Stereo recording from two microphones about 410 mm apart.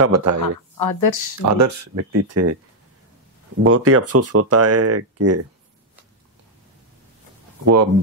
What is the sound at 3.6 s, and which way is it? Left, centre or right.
Speech, right.